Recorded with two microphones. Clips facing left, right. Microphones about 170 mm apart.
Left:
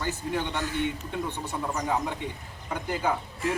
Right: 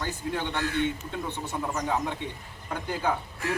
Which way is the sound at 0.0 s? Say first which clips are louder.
Left 1 dB; 15° left (ahead or behind).